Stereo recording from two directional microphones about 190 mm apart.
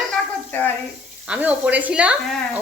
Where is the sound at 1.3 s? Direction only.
5° right (ahead or behind).